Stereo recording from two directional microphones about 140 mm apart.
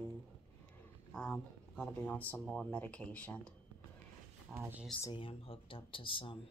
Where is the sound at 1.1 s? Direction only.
10° left (ahead or behind).